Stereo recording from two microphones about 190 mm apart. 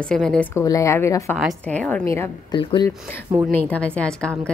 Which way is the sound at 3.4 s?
10° left (ahead or behind).